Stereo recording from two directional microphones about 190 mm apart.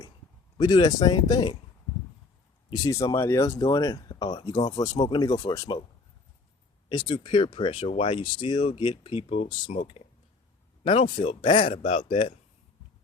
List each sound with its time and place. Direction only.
0.5 s speech: 20° left (ahead or behind)
2.6 s speech: 20° left (ahead or behind)
6.8 s speech: 25° left (ahead or behind)